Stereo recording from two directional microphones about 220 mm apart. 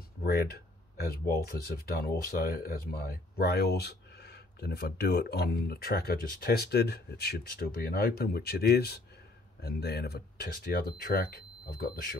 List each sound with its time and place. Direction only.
0.2 s speech: 45° left (ahead or behind)